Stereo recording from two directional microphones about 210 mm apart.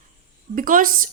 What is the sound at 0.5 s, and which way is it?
Speech, 40° right (ahead or behind).